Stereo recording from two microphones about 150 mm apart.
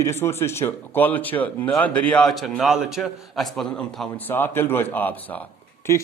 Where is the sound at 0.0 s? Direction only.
20° left (ahead or behind).